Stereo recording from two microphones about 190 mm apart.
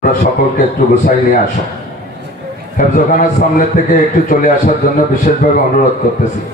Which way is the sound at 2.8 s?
45° left (ahead or behind).